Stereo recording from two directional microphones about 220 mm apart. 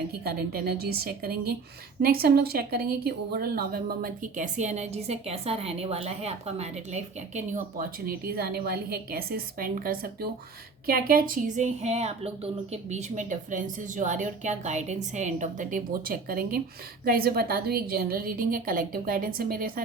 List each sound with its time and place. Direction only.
0.3 s a woman's voice: 45° right (ahead or behind)